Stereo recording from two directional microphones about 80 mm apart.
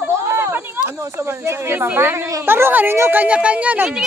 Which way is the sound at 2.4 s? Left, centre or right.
Right.